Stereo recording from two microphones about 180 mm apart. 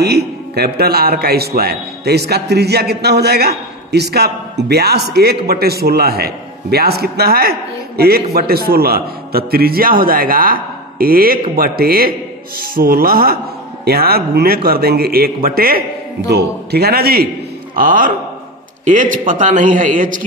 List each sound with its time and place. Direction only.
0.0 s a man's voice: 65° right (ahead or behind); by 20.2 s 45° right (ahead or behind)